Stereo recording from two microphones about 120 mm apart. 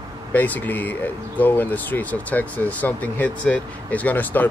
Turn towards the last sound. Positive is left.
turn(degrees=15)  # may be behind; listen again after turning